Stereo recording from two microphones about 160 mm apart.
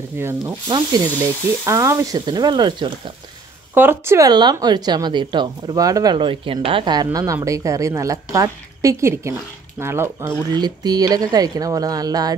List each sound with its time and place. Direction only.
0.2 s speech: 15° right (ahead or behind)
0.7 s speech: 25° right (ahead or behind)
3.7 s speech: 15° right (ahead or behind)
10.5 s speech: 25° right (ahead or behind)